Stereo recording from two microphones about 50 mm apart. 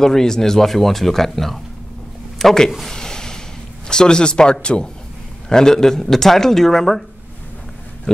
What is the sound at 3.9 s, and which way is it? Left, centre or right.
Speech, centre.